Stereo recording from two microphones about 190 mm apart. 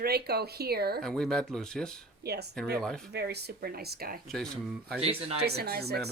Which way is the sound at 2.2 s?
60° right (ahead or behind).